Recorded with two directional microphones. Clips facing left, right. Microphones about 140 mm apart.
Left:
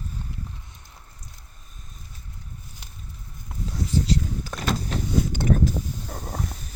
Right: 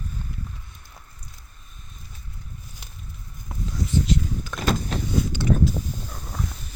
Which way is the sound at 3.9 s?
35° left (ahead or behind).